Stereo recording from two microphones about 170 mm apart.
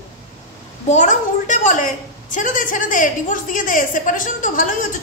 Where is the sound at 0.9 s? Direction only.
45° left (ahead or behind).